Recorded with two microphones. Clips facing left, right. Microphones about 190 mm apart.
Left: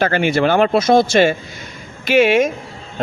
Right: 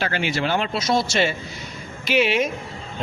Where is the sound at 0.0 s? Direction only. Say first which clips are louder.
Left 8 dB; 50° left (ahead or behind).